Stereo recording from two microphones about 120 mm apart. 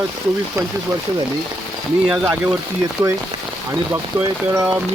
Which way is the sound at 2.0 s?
15° right (ahead or behind).